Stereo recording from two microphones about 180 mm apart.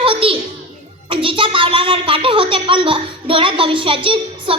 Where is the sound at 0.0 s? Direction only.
30° right (ahead or behind).